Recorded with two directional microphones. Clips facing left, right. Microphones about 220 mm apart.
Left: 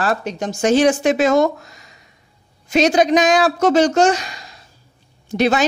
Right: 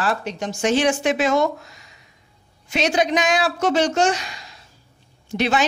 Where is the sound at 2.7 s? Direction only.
40° left (ahead or behind).